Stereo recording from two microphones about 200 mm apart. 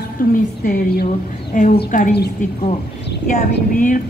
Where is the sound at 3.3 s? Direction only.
40° left (ahead or behind).